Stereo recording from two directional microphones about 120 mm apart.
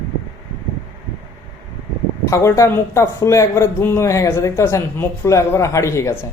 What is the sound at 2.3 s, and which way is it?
Speech, 25° left (ahead or behind).